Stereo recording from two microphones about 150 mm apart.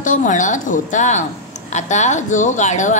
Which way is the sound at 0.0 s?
60° left (ahead or behind).